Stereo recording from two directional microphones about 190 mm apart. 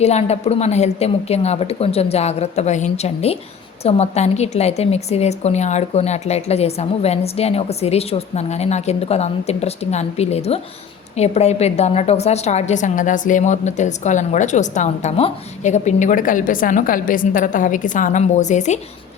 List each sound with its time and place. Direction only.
0.0 s a woman's voice: 35° left (ahead or behind)